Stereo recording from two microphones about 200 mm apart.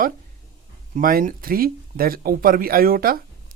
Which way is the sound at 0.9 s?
45° right (ahead or behind).